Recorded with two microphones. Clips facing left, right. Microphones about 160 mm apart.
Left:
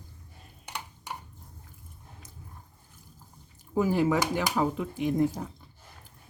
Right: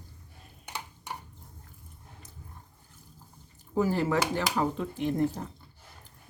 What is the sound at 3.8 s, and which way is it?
Speech, 15° left (ahead or behind).